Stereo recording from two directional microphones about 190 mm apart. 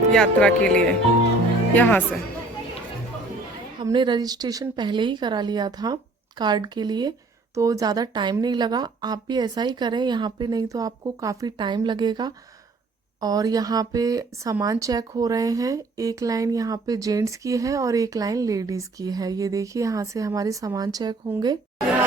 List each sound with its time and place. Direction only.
0.1 s speech: 5° left (ahead or behind)
3.8 s speech: 25° right (ahead or behind)